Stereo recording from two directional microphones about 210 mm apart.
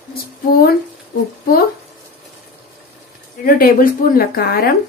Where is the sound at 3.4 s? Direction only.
45° left (ahead or behind).